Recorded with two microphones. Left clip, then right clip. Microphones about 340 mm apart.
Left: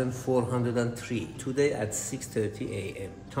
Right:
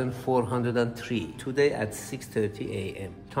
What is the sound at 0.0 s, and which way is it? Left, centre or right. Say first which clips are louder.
A man's voice: right 1 dB; centre.